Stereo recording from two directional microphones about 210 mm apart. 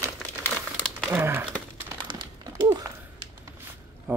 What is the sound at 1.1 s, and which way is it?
Crumpling, 10° right (ahead or behind).